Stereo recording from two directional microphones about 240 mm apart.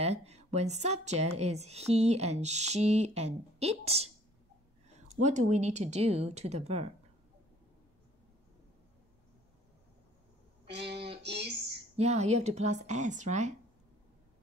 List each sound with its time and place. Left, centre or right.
0.0 s speech: right
5.2 s speech: right
10.7 s speech: right
12.0 s speech: right